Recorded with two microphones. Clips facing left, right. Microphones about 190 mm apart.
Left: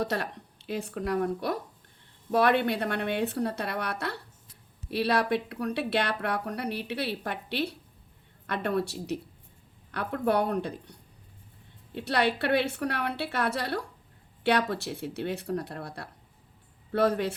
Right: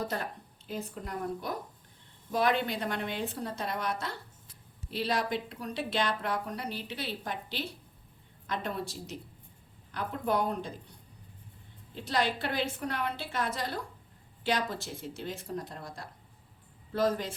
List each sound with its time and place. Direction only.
0.0 s a woman's voice: 70° left (ahead or behind)
11.9 s a woman's voice: 65° left (ahead or behind)